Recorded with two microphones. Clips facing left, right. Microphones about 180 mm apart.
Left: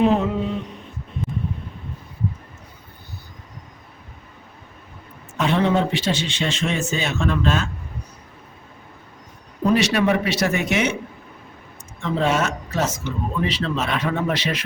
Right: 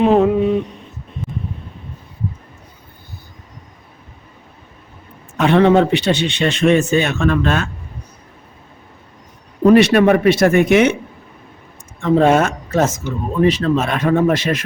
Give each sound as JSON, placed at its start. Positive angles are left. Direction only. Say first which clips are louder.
{"t": 0.0, "sound": "mantra", "louder": "right 6 dB", "side_deg": -55}
{"t": 5.4, "sound": "speech", "louder": "right 7 dB", "side_deg": -65}
{"t": 9.6, "sound": "speech", "louder": "right 8 dB", "side_deg": -55}
{"t": 11.9, "sound": "a woman's voice", "louder": "right 8 dB", "side_deg": -50}